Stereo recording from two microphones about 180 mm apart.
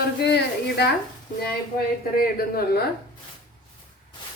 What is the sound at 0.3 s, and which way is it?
Speech, 65° left (ahead or behind).